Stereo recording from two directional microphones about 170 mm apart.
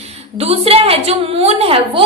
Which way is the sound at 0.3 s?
35° right (ahead or behind).